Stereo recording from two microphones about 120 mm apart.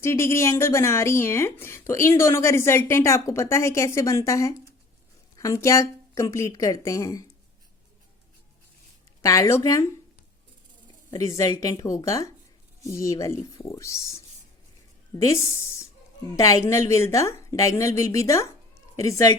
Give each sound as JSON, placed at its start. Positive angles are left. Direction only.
{"t": 0.0, "sound": "speech", "side_deg": 20}
{"t": 9.2, "sound": "speech", "side_deg": 30}
{"t": 10.8, "sound": "a woman's voice", "side_deg": 30}